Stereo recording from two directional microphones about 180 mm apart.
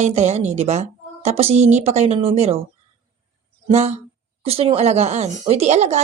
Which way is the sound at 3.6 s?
35° right (ahead or behind).